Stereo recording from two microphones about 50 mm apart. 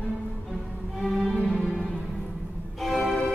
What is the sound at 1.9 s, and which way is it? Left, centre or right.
Music, centre.